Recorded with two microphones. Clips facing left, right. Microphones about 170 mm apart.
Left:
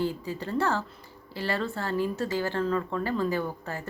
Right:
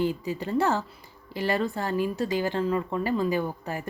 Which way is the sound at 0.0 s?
15° right (ahead or behind).